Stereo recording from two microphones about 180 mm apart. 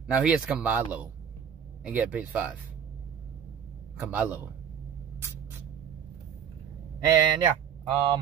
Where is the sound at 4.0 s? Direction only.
10° right (ahead or behind).